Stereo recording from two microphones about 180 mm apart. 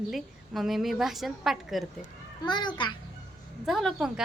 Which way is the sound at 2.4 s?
25° left (ahead or behind).